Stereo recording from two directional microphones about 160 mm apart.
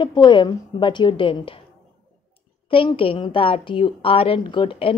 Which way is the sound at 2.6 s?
30° left (ahead or behind).